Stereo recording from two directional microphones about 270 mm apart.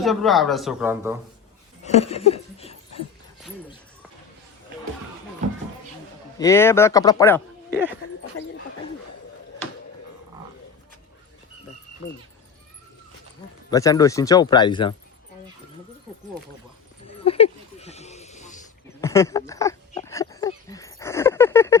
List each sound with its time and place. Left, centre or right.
0.0 s speech: centre
1.8 s a sound: left
6.4 s speech: centre
7.7 s speech: centre
8.4 s speech: left
13.7 s speech: centre
17.2 s a sound: left
19.0 s speech: centre
20.1 s a sound: centre